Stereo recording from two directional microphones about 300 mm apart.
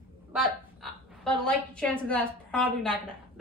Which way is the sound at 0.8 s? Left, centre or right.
Centre.